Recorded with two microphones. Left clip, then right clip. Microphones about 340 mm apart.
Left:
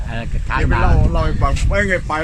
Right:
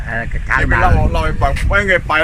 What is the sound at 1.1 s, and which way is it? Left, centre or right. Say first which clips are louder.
Speech: right 3 dB; right.